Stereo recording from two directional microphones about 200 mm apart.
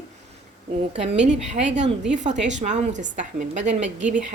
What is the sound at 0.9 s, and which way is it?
Speech, 30° right (ahead or behind).